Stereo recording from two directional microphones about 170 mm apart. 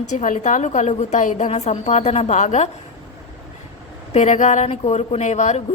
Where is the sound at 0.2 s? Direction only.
45° left (ahead or behind).